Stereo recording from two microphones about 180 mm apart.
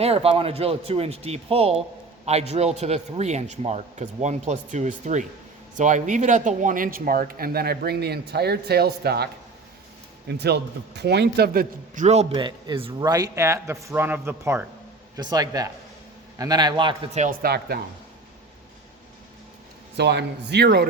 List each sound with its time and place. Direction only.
0.0 s a man's voice: 35° right (ahead or behind); by 12.0 s 55° right (ahead or behind)
12.0 s speech: 35° right (ahead or behind)
17.2 s speech: 60° right (ahead or behind)
20.0 s a man's voice: 70° right (ahead or behind)